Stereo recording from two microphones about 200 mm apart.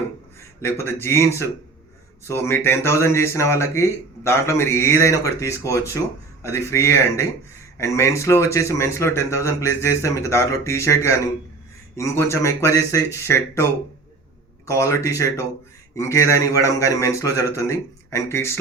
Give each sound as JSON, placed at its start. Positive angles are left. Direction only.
{"t": 0.3, "sound": "a man's voice", "side_deg": 10}